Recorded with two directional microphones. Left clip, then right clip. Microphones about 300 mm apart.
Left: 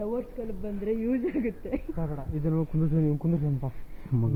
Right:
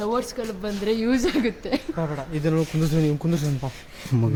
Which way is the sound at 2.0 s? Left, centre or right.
Centre.